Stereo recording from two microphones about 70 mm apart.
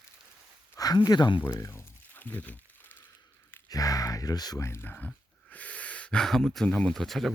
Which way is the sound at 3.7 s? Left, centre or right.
Left.